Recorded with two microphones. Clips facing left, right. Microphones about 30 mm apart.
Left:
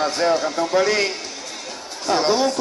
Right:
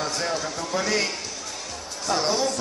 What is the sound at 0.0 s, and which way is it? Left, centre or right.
Speech, left.